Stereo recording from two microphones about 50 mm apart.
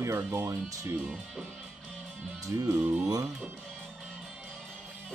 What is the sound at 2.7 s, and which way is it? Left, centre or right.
Speech, right.